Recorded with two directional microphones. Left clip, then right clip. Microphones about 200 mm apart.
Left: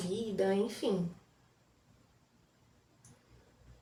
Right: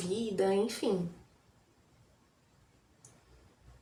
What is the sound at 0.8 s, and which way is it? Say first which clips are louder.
Speech: even; 20° right (ahead or behind).